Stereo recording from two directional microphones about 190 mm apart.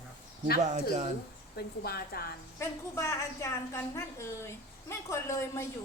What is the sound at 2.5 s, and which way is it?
A woman's voice, 15° left (ahead or behind).